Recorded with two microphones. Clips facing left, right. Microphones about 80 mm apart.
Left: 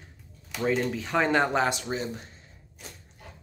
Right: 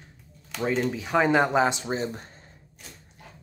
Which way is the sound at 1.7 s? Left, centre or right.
Right.